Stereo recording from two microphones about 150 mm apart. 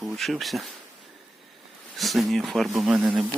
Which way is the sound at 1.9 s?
Centre (ahead or behind).